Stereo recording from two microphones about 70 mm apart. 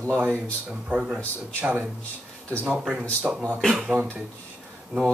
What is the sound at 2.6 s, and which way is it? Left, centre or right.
Speech, centre.